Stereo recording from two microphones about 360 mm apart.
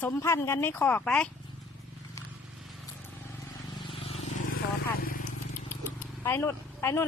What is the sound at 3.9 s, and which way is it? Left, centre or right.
Vehicle, centre.